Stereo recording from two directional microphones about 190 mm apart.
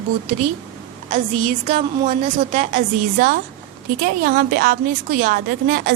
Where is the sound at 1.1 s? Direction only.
35° right (ahead or behind).